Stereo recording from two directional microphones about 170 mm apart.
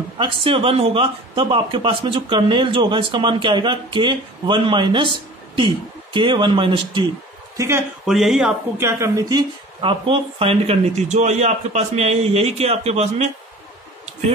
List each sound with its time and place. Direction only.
0.2 s speech: 30° right (ahead or behind)
7.5 s speech: 15° right (ahead or behind)
8.1 s speech: centre (ahead or behind)
8.8 s speech: 20° right (ahead or behind); by 13.3 s 40° right (ahead or behind)